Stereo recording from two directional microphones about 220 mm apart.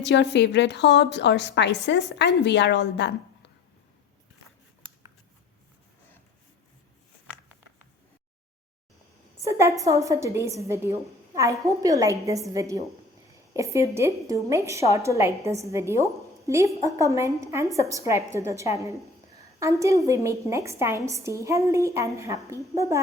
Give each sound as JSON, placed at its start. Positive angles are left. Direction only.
{"t": 0.0, "sound": "a woman's voice", "side_deg": 50}
{"t": 9.4, "sound": "a woman's voice", "side_deg": -15}